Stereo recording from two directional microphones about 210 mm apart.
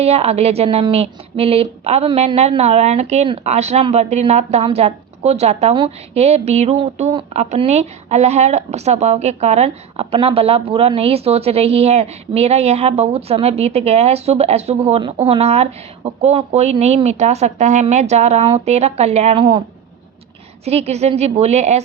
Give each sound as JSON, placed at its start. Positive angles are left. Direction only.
{"t": 0.0, "sound": "a woman's voice", "side_deg": -30}
{"t": 20.7, "sound": "a woman's voice", "side_deg": -30}